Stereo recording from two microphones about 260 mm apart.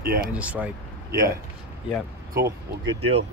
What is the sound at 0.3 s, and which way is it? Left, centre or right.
Speech, centre.